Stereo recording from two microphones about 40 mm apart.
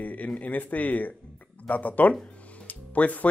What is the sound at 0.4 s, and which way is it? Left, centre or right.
A man's voice, left.